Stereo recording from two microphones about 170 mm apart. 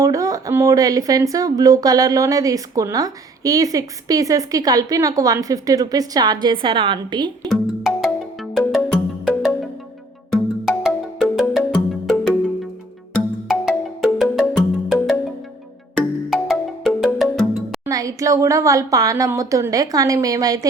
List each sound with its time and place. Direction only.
0.0 s speech: 20° right (ahead or behind)
7.4 s music: centre (ahead or behind)
13.5 s music: 5° right (ahead or behind)
16.0 s music: centre (ahead or behind)
17.8 s speech: 20° right (ahead or behind)